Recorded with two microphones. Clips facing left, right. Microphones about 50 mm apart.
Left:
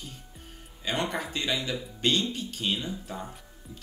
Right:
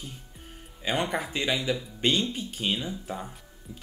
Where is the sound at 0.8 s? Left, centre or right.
Centre.